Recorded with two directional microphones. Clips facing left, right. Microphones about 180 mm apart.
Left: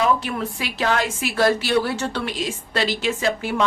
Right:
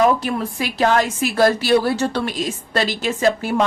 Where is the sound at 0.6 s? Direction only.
45° right (ahead or behind).